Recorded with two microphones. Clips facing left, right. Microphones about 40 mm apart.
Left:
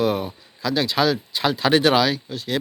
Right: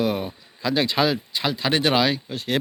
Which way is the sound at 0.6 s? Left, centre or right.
Centre.